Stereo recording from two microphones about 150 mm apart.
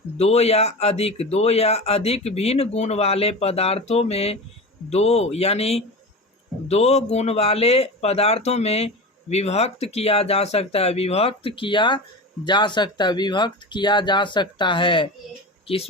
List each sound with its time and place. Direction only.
0.2 s speech: 45° left (ahead or behind)